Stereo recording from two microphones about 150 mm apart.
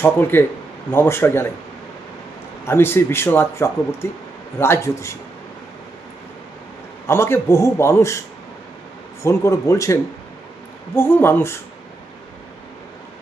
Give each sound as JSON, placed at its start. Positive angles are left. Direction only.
{"t": 0.0, "sound": "speech", "side_deg": 15}
{"t": 2.6, "sound": "speech", "side_deg": 15}
{"t": 7.1, "sound": "a man's voice", "side_deg": 15}
{"t": 9.2, "sound": "a man's voice", "side_deg": 20}